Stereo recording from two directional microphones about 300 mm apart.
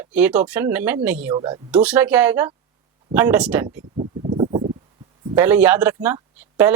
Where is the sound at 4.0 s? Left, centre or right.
Right.